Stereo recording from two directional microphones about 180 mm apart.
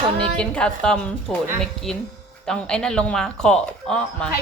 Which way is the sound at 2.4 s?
5° left (ahead or behind).